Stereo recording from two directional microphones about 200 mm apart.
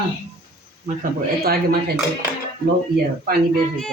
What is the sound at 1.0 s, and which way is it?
Speech, 50° right (ahead or behind).